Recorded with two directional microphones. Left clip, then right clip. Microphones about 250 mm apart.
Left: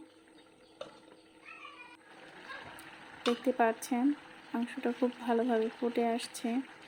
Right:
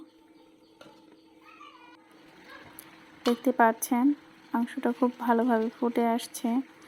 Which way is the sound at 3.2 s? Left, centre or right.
Centre.